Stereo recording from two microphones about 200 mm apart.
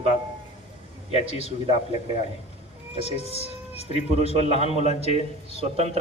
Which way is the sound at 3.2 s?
30° right (ahead or behind).